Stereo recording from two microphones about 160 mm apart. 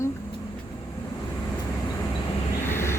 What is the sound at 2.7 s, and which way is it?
Vehicle, 15° left (ahead or behind).